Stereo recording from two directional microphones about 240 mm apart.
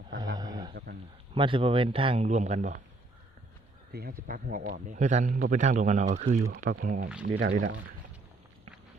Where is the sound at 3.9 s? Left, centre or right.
Right.